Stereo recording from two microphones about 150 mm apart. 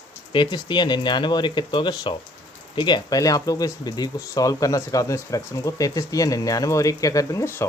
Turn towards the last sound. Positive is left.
turn(degrees=20)  # may be behind; listen again after turning